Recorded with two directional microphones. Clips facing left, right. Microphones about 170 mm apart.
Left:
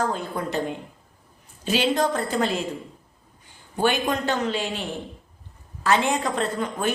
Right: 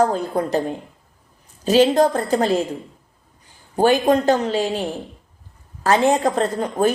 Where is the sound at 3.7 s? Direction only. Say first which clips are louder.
Right 7 dB; 40° right (ahead or behind).